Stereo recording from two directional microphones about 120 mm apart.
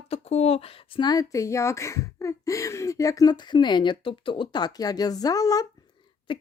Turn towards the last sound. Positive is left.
turn(degrees=45)  # may be behind; listen again after turning